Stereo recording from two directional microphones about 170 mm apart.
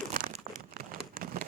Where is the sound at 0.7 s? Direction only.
60° right (ahead or behind).